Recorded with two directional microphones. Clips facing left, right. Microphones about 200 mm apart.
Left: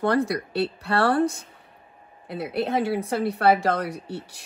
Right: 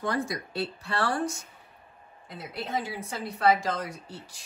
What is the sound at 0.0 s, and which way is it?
A woman's voice, 65° left (ahead or behind).